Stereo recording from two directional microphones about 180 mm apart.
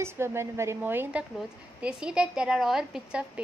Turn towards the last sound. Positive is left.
turn(degrees=-5)  # may be behind; listen again after turning